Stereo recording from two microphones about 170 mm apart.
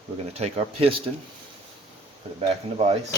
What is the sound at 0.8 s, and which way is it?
Speech, 30° right (ahead or behind).